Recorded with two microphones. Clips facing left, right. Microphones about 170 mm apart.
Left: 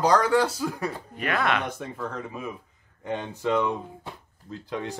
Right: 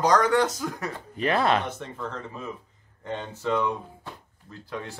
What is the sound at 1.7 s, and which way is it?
Speech, 10° left (ahead or behind).